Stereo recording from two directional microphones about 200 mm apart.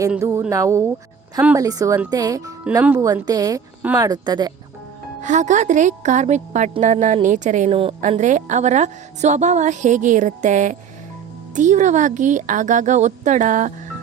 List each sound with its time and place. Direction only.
0.2 s a woman's voice: 15° right (ahead or behind)
5.2 s a woman's voice: 35° right (ahead or behind)